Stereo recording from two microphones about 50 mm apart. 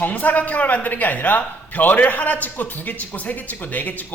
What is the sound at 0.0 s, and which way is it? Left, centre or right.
A man's voice, left.